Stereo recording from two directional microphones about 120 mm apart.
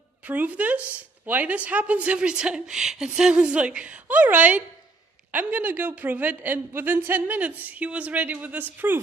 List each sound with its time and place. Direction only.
0.3 s a woman's voice: 10° right (ahead or behind)